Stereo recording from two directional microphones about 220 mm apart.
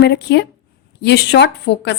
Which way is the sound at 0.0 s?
50° left (ahead or behind).